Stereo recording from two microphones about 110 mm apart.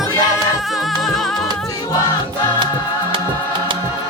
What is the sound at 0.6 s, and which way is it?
Music, centre (ahead or behind).